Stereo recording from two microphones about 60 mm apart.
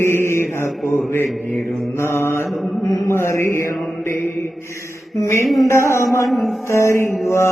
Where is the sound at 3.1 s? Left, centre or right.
Left.